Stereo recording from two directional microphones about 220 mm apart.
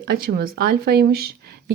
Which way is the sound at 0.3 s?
45° right (ahead or behind).